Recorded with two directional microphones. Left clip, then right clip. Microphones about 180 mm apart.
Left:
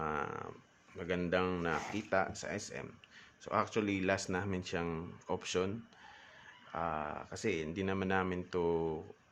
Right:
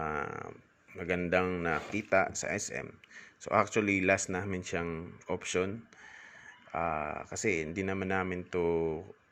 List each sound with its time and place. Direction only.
0.0 s a sound: 15° right (ahead or behind)
1.6 s speech: 15° right (ahead or behind)
6.7 s speech: 15° right (ahead or behind)